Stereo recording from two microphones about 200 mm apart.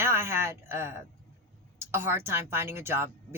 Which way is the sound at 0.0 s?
10° right (ahead or behind).